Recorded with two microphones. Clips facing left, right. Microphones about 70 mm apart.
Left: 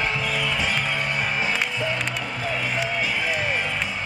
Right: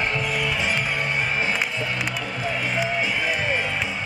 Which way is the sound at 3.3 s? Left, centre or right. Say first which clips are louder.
Right 1 dB; centre.